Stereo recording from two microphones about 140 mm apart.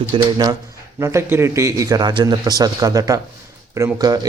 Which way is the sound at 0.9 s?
20° right (ahead or behind).